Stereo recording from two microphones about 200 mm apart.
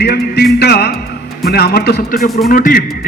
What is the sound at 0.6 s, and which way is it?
Music, 55° left (ahead or behind).